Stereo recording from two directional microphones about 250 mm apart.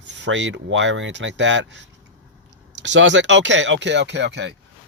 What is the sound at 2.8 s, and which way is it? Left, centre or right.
Speech, right.